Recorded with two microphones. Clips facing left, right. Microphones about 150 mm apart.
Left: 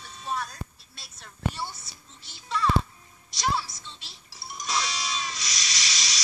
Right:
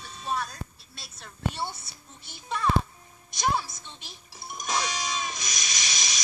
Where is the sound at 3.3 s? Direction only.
50° right (ahead or behind).